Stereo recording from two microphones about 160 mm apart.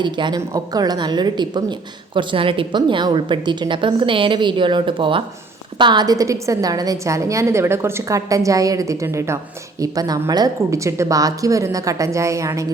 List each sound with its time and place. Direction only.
0.0 s a woman's voice: 30° right (ahead or behind)